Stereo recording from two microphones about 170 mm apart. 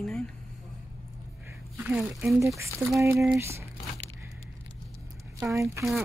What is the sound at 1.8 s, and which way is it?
Speech, 5° right (ahead or behind).